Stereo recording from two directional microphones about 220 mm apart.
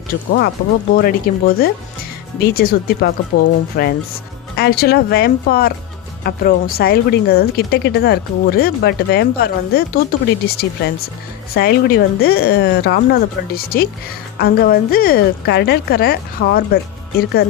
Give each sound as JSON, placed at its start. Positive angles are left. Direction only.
{"t": 0.1, "sound": "speech", "side_deg": 40}